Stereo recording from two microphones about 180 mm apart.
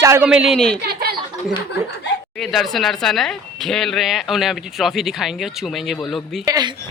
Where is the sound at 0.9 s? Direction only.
60° right (ahead or behind).